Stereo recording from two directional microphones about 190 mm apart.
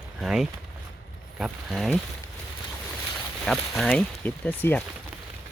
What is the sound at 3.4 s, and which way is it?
Speech, centre (ahead or behind).